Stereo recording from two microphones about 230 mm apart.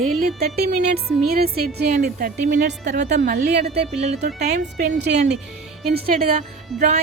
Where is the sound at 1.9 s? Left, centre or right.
Right.